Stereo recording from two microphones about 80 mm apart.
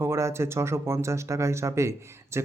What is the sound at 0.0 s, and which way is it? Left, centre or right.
Speech, right.